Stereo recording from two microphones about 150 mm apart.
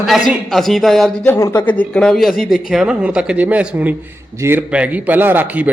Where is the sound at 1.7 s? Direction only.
10° left (ahead or behind); by 5.7 s 10° right (ahead or behind).